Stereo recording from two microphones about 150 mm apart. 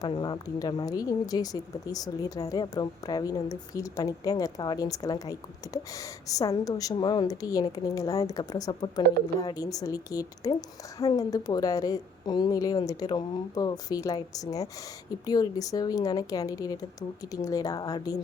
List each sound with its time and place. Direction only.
0.0 s speech: 30° left (ahead or behind)